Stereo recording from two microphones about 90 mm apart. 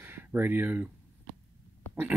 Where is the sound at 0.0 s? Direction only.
20° right (ahead or behind).